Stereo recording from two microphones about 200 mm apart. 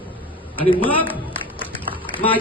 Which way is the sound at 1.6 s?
25° left (ahead or behind).